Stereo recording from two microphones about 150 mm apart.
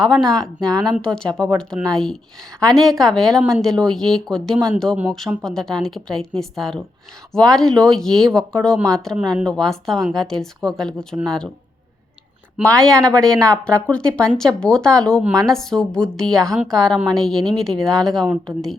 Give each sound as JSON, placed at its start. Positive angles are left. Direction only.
{"t": 0.0, "sound": "speech", "side_deg": 0}
{"t": 12.6, "sound": "speech", "side_deg": 5}